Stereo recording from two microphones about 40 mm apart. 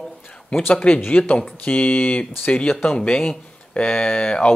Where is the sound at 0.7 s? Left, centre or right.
Left.